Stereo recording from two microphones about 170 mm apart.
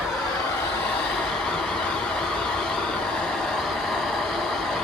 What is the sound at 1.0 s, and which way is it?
Vehicle, 5° left (ahead or behind).